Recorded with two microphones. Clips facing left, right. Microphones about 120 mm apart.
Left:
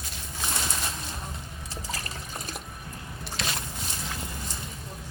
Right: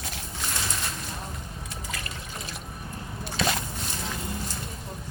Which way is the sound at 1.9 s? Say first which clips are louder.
Left 2 dB; 35° left (ahead or behind).